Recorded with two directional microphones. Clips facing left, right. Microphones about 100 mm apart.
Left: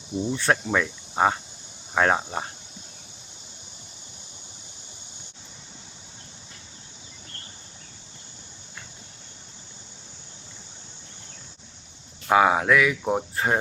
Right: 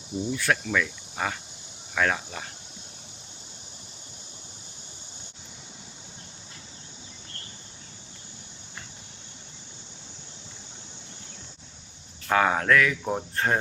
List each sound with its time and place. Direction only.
0.3 s speech: 30° left (ahead or behind)
12.3 s speech: 10° left (ahead or behind)